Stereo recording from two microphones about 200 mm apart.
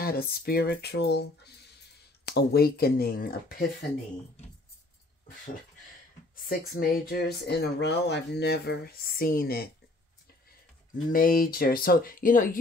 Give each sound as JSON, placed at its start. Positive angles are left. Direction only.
{"t": 0.0, "sound": "speech", "side_deg": 50}
{"t": 6.3, "sound": "speech", "side_deg": 45}
{"t": 11.1, "sound": "speech", "side_deg": 45}